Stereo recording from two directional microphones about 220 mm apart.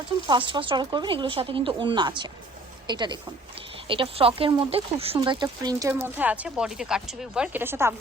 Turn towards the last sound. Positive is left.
turn(degrees=-10)  # may be behind; listen again after turning